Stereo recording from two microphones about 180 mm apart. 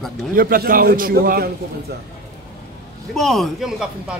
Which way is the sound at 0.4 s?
50° right (ahead or behind).